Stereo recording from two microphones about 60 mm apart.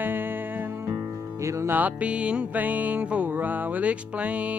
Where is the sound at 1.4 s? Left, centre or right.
Right.